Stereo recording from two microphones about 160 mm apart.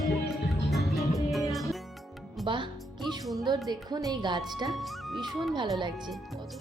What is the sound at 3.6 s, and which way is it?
Speech, 25° right (ahead or behind).